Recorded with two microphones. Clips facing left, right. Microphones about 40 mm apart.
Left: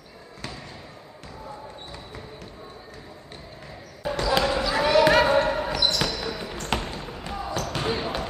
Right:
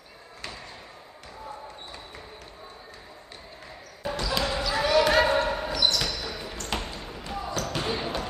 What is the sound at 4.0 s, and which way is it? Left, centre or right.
Basketball bounce, centre.